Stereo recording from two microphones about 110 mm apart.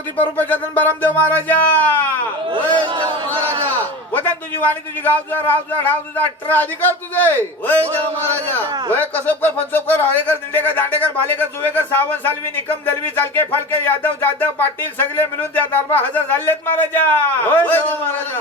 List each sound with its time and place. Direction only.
0.2 s speech: 15° left (ahead or behind)
2.9 s speech: 45° right (ahead or behind)
4.1 s speech: 15° left (ahead or behind)
8.9 s speech: 15° left (ahead or behind)